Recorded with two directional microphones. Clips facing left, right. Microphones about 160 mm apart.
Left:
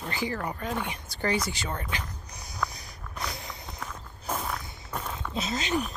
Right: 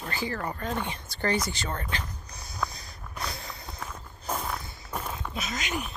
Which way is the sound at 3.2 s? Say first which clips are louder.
Even; 20° left (ahead or behind).